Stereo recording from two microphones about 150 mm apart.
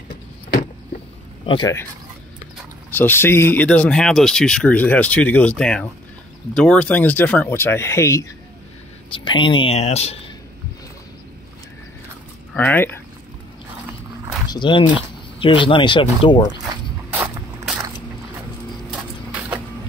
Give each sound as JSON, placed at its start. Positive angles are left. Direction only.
{"t": 1.4, "sound": "speech", "side_deg": 35}
{"t": 2.9, "sound": "speech", "side_deg": 15}
{"t": 9.1, "sound": "speech", "side_deg": 35}
{"t": 12.5, "sound": "speech", "side_deg": 10}
{"t": 14.5, "sound": "speech", "side_deg": 30}
{"t": 17.1, "sound": "a sound", "side_deg": -10}